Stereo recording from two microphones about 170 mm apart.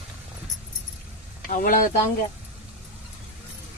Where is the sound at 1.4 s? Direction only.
55° left (ahead or behind).